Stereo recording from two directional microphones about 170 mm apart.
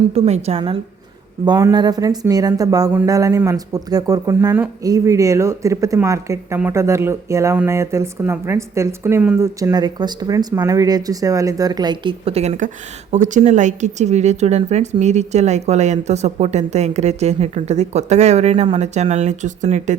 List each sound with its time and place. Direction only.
0.1 s speech: 35° right (ahead or behind)
1.5 s speech: 25° right (ahead or behind); by 20.0 s 45° right (ahead or behind)